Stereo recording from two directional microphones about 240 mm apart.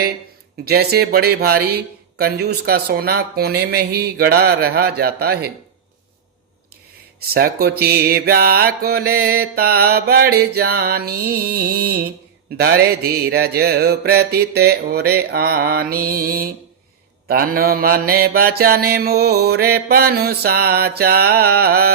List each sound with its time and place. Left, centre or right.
0.6 s speech: right
7.2 s speech: right